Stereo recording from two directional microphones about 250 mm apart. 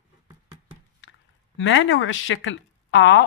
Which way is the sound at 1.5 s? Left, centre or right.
Left.